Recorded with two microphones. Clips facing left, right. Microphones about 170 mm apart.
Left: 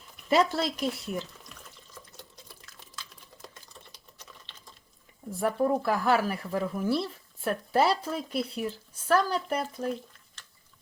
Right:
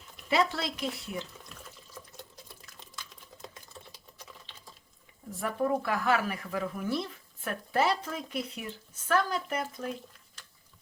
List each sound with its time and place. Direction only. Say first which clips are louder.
0.3 s speech: left 4 dB; 40° left (ahead or behind)
4.3 s sewing machine: even; 5° right (ahead or behind)
5.3 s speech: left 3 dB; 35° left (ahead or behind)